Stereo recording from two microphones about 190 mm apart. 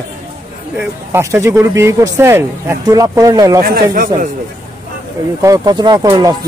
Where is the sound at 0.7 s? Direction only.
15° right (ahead or behind).